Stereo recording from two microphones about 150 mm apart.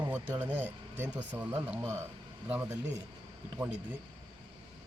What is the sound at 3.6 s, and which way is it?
Speech, 10° right (ahead or behind).